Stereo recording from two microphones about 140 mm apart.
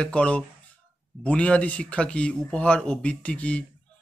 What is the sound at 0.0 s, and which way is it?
Speech, 10° left (ahead or behind).